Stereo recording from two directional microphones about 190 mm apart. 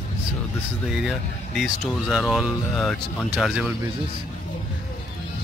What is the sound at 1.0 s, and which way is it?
Speech, centre (ahead or behind).